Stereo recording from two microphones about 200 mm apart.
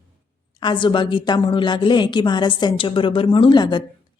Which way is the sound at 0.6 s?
25° left (ahead or behind).